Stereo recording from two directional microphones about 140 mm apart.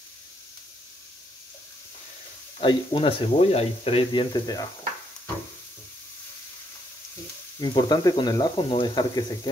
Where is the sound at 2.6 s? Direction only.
40° left (ahead or behind).